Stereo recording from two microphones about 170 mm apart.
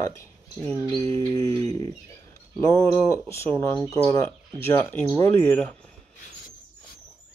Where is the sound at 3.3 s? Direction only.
15° left (ahead or behind).